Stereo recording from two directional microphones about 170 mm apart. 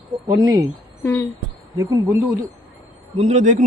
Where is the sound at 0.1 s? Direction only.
20° right (ahead or behind).